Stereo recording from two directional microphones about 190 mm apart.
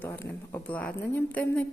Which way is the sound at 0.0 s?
10° left (ahead or behind).